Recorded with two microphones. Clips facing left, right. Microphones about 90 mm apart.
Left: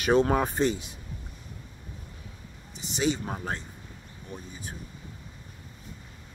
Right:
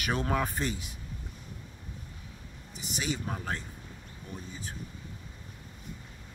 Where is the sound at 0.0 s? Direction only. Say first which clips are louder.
Left 7 dB; 25° left (ahead or behind).